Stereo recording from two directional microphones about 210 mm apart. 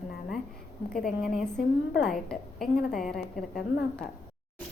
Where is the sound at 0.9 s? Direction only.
Centre (ahead or behind).